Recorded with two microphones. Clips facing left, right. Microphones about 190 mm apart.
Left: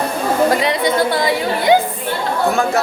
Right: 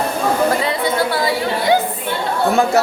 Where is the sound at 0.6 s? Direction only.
15° left (ahead or behind).